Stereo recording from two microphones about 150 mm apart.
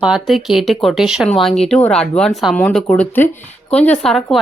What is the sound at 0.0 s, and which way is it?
Speech, centre (ahead or behind).